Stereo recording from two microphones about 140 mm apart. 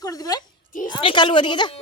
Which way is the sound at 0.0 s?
25° left (ahead or behind).